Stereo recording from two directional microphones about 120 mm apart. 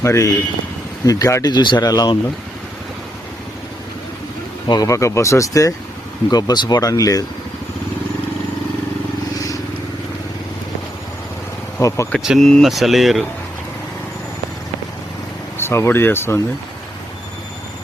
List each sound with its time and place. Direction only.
0.0 s speech: 25° left (ahead or behind)
4.7 s speech: 30° left (ahead or behind)
11.8 s speech: 25° left (ahead or behind)
12.2 s speech: 5° right (ahead or behind)
15.5 s speech: 20° left (ahead or behind)